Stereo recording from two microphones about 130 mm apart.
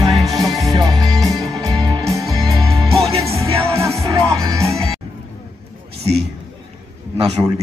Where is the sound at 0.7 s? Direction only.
30° right (ahead or behind).